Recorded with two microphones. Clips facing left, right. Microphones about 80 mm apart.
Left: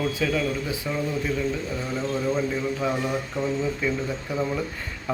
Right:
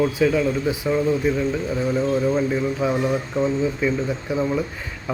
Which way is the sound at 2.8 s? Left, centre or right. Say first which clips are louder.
Right 4 dB; centre.